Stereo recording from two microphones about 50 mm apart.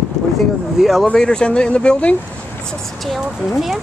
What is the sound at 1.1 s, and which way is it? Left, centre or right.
Speech, centre.